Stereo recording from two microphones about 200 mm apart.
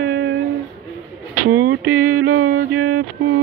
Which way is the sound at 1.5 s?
90° right.